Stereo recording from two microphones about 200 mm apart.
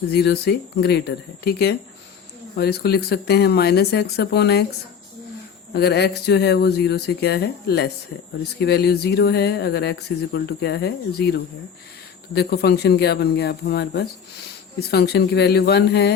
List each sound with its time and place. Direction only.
0.1 s speech: 55° left (ahead or behind)
5.7 s speech: 55° left (ahead or behind)